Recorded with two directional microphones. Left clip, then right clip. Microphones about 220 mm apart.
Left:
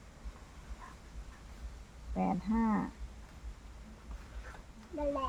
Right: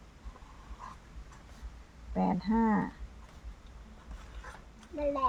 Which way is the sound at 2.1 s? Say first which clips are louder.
Right 4 dB; 45° right (ahead or behind).